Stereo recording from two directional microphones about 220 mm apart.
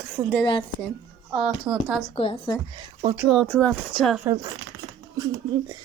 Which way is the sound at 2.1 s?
25° left (ahead or behind).